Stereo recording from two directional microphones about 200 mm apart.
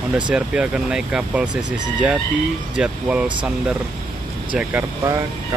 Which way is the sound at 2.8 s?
5° right (ahead or behind).